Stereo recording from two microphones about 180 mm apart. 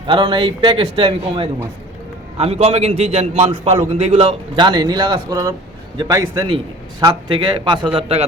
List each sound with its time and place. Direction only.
0.1 s a man's voice: 25° right (ahead or behind)
2.4 s a man's voice: 35° right (ahead or behind)